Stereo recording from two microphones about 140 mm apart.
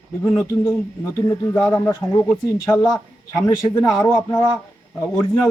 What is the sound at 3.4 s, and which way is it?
Speech, 25° left (ahead or behind).